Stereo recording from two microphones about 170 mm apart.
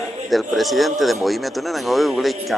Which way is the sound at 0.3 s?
Centre (ahead or behind).